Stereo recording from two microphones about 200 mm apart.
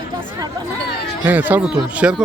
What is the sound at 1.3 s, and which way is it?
Speech, 10° right (ahead or behind).